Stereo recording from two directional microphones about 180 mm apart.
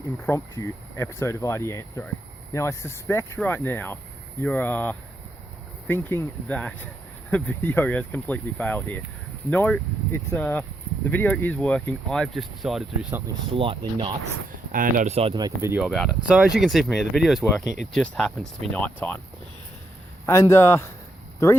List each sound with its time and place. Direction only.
0.3 s speech: 15° left (ahead or behind); by 13.2 s 5° right (ahead or behind)
13.5 s speech: 30° right (ahead or behind)
14.7 s speech: 50° right (ahead or behind); by 15.8 s 20° right (ahead or behind)
15.8 s speech: centre (ahead or behind)
20.2 s speech: 15° left (ahead or behind)